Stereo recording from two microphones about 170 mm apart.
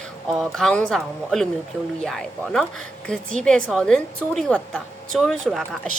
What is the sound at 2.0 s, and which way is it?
Speech, 5° left (ahead or behind).